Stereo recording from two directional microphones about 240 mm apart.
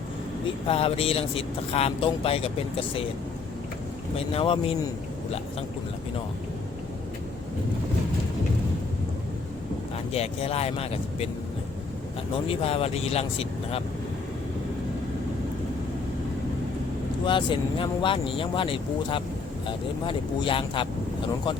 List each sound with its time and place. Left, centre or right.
0.7 s speech: left
4.2 s speech: left
10.1 s speech: left
12.5 s speech: left
17.2 s speech: left